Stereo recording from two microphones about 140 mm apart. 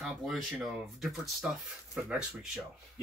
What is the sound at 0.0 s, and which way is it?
Speech, centre (ahead or behind).